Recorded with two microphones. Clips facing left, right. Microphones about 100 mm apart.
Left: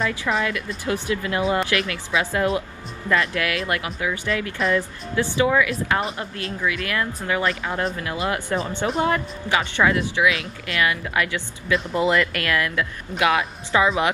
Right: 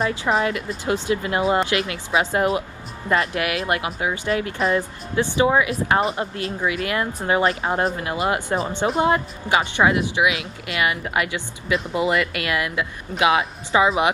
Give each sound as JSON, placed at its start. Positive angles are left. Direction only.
{"t": 0.3, "sound": "speech", "side_deg": -30}